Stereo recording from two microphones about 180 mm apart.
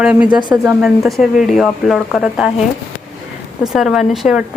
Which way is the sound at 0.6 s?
5° right (ahead or behind).